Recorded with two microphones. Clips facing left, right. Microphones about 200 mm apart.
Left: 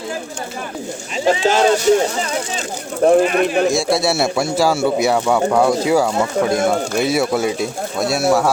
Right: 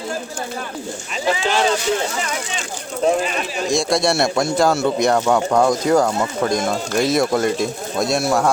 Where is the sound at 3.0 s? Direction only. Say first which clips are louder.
Left 6 dB; 55° left (ahead or behind).